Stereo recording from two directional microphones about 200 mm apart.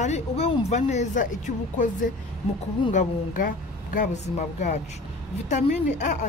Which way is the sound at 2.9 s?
40° left (ahead or behind).